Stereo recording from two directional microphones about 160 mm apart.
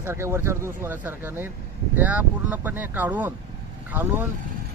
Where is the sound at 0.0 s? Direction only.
15° right (ahead or behind).